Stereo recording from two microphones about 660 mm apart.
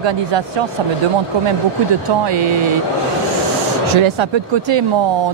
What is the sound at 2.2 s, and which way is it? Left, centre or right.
Speech, right.